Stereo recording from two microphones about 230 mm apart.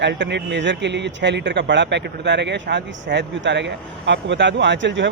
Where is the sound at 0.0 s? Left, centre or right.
Right.